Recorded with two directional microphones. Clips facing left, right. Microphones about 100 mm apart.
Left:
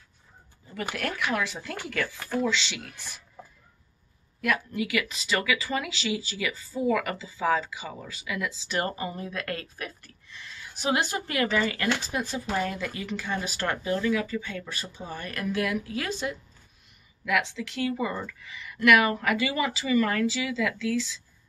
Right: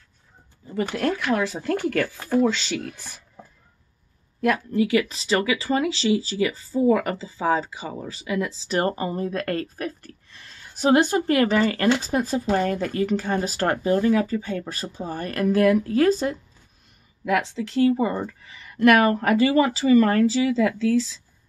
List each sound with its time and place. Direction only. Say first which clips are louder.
0.9 s speech: right 9 dB; 25° right (ahead or behind)
1.3 s speech: right 7 dB; 35° right (ahead or behind)
4.4 s speech: right 7 dB; 35° right (ahead or behind)